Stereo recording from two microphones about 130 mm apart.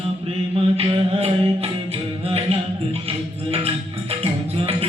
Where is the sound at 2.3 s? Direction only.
50° right (ahead or behind).